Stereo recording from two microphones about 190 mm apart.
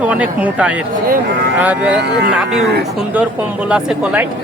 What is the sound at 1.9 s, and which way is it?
Speech, 60° right (ahead or behind).